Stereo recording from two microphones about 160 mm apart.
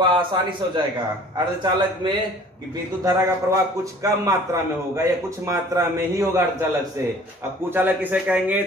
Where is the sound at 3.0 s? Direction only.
20° right (ahead or behind).